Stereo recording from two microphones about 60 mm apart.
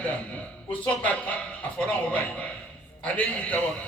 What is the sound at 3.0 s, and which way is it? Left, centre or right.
Speech, left.